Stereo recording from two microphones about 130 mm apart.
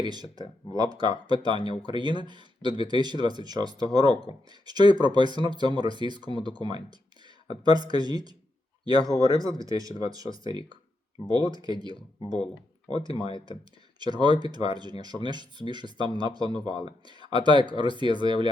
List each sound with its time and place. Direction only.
0.0 s speech: 35° right (ahead or behind)
13.1 s speech: 40° left (ahead or behind)
14.0 s speech: 35° right (ahead or behind)